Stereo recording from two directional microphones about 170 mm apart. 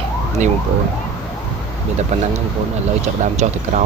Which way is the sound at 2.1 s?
40° right (ahead or behind).